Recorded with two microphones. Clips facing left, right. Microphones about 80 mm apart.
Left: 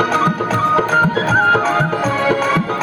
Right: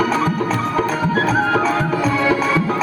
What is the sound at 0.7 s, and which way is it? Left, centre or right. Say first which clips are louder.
Music: left 5 dB; left.